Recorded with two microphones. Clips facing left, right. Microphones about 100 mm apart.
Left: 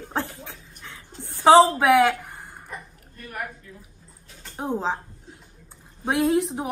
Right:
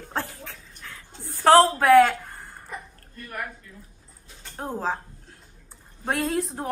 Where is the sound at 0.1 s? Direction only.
20° left (ahead or behind).